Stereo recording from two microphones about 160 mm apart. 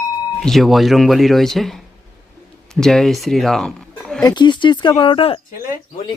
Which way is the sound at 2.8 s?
5° left (ahead or behind).